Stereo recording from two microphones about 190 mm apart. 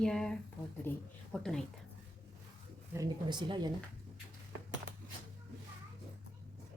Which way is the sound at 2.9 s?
20° right (ahead or behind).